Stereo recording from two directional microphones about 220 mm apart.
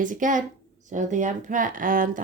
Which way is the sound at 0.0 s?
35° right (ahead or behind).